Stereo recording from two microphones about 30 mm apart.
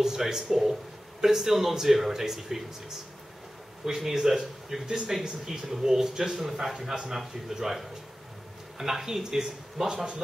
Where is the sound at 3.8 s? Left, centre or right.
Centre.